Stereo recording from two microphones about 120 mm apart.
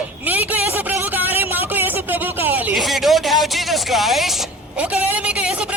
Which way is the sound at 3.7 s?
Centre (ahead or behind).